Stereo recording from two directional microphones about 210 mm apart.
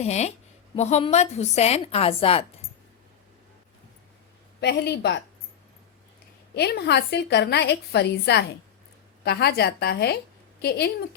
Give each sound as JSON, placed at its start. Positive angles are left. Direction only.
{"t": 0.0, "sound": "a woman's voice", "side_deg": 30}
{"t": 4.6, "sound": "a woman's voice", "side_deg": 50}
{"t": 6.5, "sound": "a woman's voice", "side_deg": 50}